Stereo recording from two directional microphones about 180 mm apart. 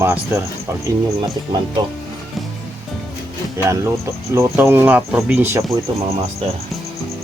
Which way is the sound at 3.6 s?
15° right (ahead or behind).